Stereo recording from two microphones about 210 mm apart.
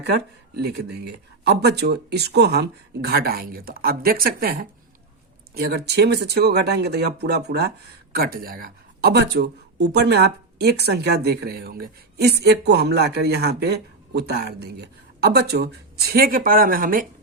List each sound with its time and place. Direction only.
0.0 s speech: 50° right (ahead or behind)